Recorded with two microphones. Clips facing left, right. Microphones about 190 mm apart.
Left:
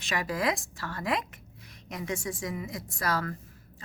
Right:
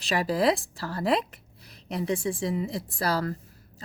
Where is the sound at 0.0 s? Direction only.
35° right (ahead or behind).